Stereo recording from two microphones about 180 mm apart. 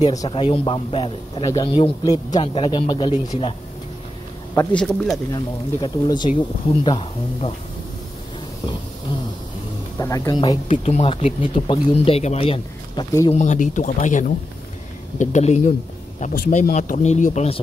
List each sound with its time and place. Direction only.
0.0 s a man's voice: 20° left (ahead or behind)
4.7 s speech: centre (ahead or behind)
5.3 s a man's voice: 25° left (ahead or behind)
9.9 s a man's voice: 20° left (ahead or behind)
10.7 s speech: 35° left (ahead or behind)
13.3 s speech: 40° left (ahead or behind)